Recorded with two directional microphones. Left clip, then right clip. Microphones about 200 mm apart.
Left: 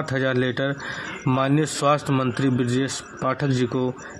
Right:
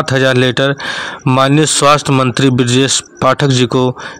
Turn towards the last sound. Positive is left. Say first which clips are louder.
# right 12 dB
turn(degrees=-45)  # may be behind; listen again after turning